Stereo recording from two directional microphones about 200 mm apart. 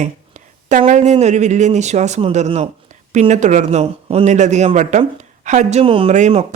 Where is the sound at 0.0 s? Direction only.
35° right (ahead or behind).